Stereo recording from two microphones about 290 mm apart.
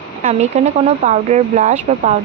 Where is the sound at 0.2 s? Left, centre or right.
Right.